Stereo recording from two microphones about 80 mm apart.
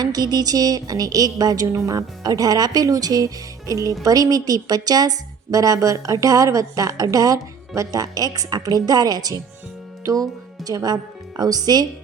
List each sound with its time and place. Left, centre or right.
0.0 s speech: right